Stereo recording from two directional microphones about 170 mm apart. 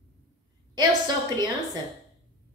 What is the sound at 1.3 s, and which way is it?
Speech, 25° right (ahead or behind).